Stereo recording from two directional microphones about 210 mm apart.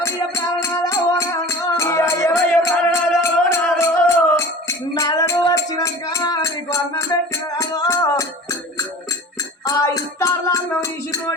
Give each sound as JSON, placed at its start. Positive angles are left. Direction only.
{"t": 0.0, "sound": "music", "side_deg": 15}
{"t": 9.6, "sound": "music", "side_deg": 15}